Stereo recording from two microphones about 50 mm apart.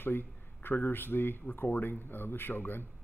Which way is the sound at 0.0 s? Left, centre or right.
Left.